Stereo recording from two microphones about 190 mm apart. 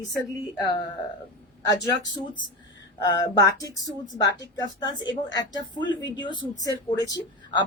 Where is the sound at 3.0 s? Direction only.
20° left (ahead or behind).